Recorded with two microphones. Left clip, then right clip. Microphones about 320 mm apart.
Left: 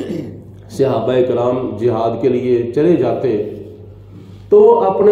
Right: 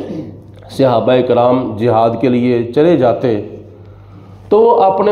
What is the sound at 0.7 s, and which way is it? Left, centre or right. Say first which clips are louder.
A man's voice: right 3 dB; right.